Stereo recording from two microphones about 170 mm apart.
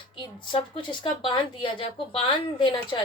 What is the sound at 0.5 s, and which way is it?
Speech, 30° left (ahead or behind).